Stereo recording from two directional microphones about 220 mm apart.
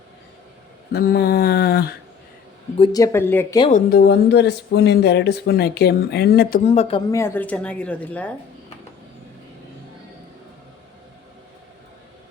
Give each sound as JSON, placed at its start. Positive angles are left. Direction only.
{"t": 0.9, "sound": "speech", "side_deg": 45}
{"t": 2.7, "sound": "speech", "side_deg": 20}
{"t": 3.7, "sound": "speech", "side_deg": 40}
{"t": 7.2, "sound": "speech", "side_deg": 10}